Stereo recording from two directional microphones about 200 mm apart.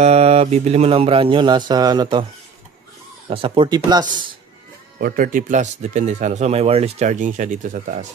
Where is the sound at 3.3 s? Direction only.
25° right (ahead or behind).